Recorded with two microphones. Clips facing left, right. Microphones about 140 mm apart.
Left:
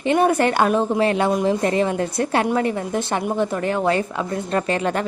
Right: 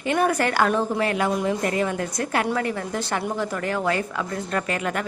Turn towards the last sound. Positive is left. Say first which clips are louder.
# left 5 dB
turn(degrees=30)  # may be behind; listen again after turning